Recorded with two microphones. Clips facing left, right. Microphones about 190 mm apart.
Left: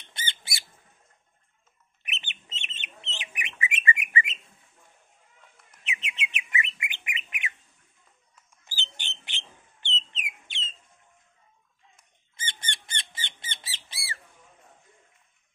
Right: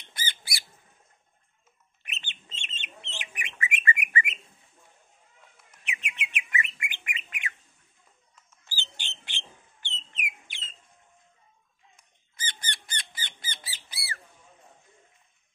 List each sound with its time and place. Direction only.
0.1 s bird: 25° left (ahead or behind)
2.0 s chicken: 20° left (ahead or behind)
3.2 s bird: 20° left (ahead or behind)
5.9 s bird: 20° left (ahead or behind)
8.6 s a sound: 20° left (ahead or behind)
9.2 s bird: 20° left (ahead or behind)
12.4 s squawk: 25° left (ahead or behind)